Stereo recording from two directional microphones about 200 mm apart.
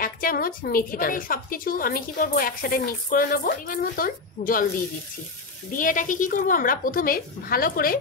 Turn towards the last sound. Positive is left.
turn(degrees=45)  # may be behind; listen again after turning